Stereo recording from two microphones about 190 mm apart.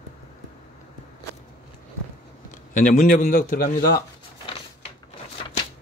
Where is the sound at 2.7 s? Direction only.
45° left (ahead or behind).